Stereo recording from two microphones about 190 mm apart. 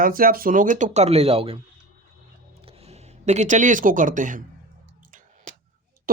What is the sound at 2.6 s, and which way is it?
Speech, 35° right (ahead or behind).